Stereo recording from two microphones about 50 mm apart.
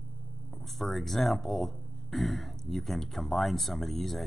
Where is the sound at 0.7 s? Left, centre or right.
Centre.